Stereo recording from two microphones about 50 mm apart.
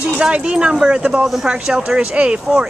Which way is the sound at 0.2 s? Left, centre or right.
Centre.